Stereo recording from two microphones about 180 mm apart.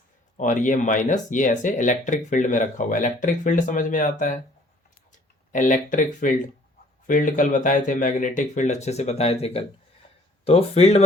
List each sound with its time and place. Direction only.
0.3 s speech: 45° left (ahead or behind)
5.5 s speech: 45° left (ahead or behind)